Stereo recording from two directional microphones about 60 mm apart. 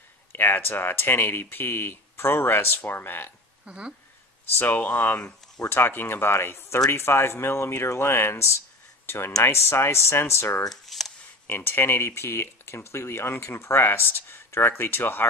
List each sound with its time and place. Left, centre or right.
0.3 s speech: left
3.6 s speech: centre
4.6 s speech: left
5.6 s speech: left
10.7 s a sound: centre
11.4 s speech: left